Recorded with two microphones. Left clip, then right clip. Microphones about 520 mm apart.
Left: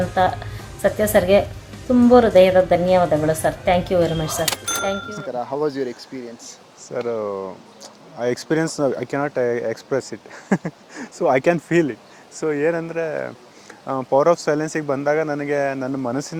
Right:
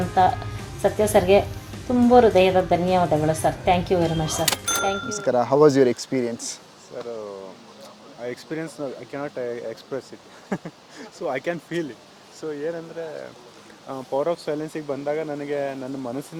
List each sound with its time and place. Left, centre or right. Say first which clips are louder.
0.2 s a woman's voice: right 2 dB; centre
5.3 s speech: right 7 dB; right
6.9 s speech: left 9 dB; left
13.8 s speech: left 8 dB; left